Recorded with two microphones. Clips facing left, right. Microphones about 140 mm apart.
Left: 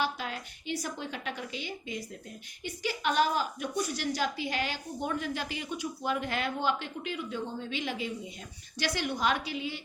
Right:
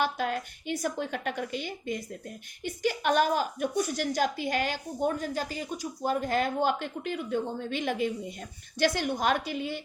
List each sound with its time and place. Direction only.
0.0 s a woman's voice: 50° right (ahead or behind)